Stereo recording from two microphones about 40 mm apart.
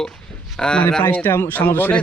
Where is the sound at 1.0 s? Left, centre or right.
Left.